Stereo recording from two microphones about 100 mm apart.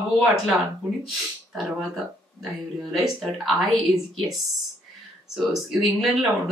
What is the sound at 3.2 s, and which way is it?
Speech, centre (ahead or behind).